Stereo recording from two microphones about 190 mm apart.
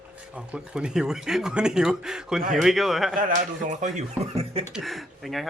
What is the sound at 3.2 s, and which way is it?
Speech, 45° right (ahead or behind).